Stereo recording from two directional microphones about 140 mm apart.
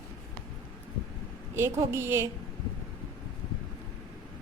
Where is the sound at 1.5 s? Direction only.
20° right (ahead or behind).